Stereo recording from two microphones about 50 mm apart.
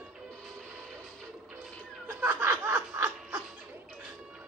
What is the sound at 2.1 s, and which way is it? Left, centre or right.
Snicker, right.